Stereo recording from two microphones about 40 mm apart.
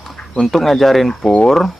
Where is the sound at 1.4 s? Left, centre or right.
Centre.